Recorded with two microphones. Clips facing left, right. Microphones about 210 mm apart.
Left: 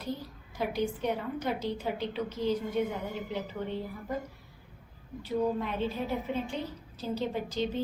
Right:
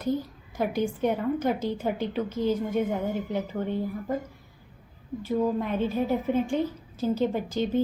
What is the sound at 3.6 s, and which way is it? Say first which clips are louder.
Speech: right 6 dB; 50° right (ahead or behind).